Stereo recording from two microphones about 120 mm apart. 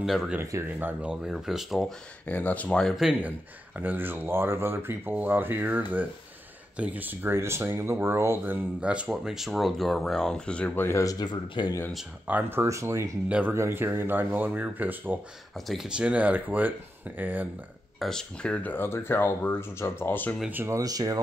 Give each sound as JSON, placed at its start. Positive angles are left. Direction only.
{"t": 0.0, "sound": "speech", "side_deg": 0}
{"t": 0.5, "sound": "speech", "side_deg": -20}
{"t": 2.2, "sound": "speech", "side_deg": 15}
{"t": 3.0, "sound": "speech", "side_deg": -10}
{"t": 8.8, "sound": "speech", "side_deg": -10}
{"t": 12.3, "sound": "speech", "side_deg": -15}
{"t": 13.3, "sound": "speech", "side_deg": -15}
{"t": 15.5, "sound": "speech", "side_deg": 0}
{"t": 17.9, "sound": "speech", "side_deg": 5}
{"t": 20.3, "sound": "speech", "side_deg": -15}